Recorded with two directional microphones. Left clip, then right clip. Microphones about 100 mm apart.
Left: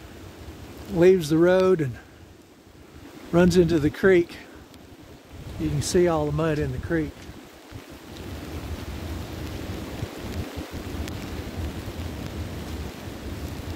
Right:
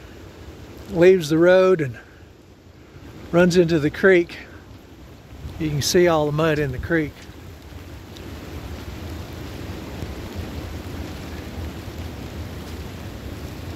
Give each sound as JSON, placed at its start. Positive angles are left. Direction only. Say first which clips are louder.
{"t": 0.9, "sound": "speech", "louder": "right 3 dB", "side_deg": 50}
{"t": 3.3, "sound": "speech", "louder": "right 3 dB", "side_deg": 75}
{"t": 5.6, "sound": "speech", "louder": "right 5 dB", "side_deg": -10}
{"t": 5.9, "sound": "speech", "louder": "right 4 dB", "side_deg": -30}